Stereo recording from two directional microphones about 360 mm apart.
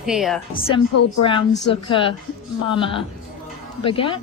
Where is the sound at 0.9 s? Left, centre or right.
Left.